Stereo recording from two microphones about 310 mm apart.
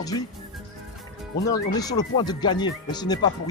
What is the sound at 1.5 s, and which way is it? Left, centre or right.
Speech, centre.